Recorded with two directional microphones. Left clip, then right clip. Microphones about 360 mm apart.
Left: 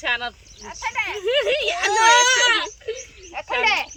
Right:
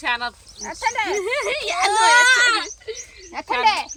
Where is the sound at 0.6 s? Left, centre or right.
Right.